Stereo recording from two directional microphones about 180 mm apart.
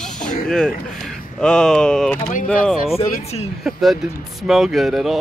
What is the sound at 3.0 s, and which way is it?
Speech, 35° left (ahead or behind).